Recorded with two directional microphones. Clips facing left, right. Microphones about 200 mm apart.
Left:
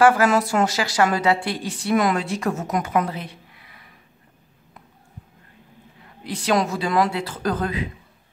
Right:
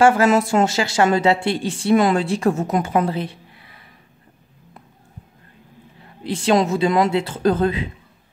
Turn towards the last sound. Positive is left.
turn(degrees=-25)  # may be behind; listen again after turning